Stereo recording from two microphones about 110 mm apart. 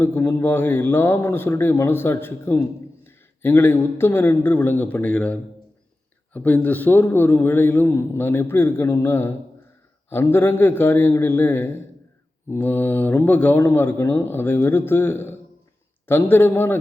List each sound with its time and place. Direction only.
0.0 s a man's voice: 20° left (ahead or behind)